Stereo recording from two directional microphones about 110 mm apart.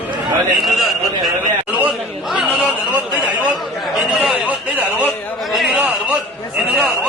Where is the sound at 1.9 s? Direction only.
5° right (ahead or behind).